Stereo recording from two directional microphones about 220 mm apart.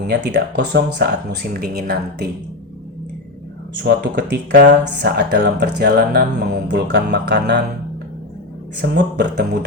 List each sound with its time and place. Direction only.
0.1 s speech: 50° right (ahead or behind)
3.8 s speech: 50° right (ahead or behind)
8.8 s speech: 50° right (ahead or behind)